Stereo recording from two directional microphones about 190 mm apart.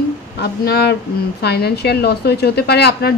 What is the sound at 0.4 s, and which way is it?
Speech, 60° left (ahead or behind).